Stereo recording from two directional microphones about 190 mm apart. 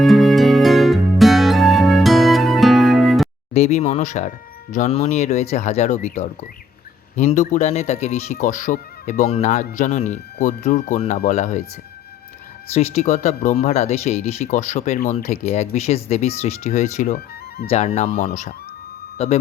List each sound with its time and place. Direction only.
0.0 s music: centre (ahead or behind)
3.5 s speech: 35° left (ahead or behind)
12.7 s speech: 35° left (ahead or behind)